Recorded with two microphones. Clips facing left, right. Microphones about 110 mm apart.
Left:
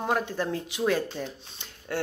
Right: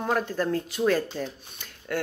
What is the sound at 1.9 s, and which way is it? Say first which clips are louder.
Speech: right 1 dB; 25° left (ahead or behind).